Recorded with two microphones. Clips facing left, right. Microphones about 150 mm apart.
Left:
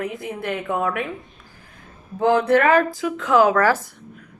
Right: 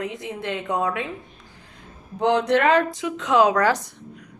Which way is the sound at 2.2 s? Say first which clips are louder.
Left 2 dB; 20° right (ahead or behind).